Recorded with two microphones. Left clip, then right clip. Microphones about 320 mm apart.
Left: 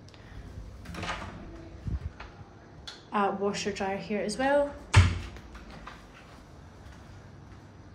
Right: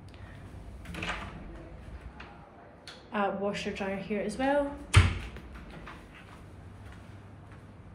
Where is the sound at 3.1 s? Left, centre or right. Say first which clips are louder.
Left 3 dB; centre.